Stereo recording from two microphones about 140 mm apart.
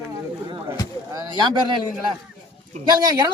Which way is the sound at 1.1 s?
30° right (ahead or behind).